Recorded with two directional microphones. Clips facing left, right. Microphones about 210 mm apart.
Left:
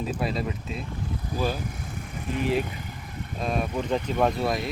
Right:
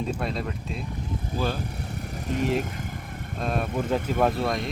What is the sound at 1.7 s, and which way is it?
Vehicle, 40° right (ahead or behind).